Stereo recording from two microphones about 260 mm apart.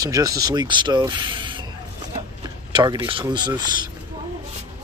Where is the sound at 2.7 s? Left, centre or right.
Centre.